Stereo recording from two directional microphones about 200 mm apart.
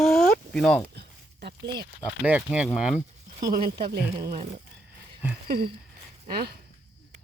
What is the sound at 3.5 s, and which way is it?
Speech, 50° right (ahead or behind).